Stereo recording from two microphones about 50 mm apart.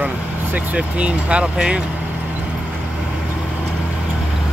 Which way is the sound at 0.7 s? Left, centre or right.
Right.